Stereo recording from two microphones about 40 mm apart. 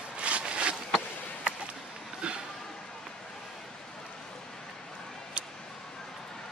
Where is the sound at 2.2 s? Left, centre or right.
Right.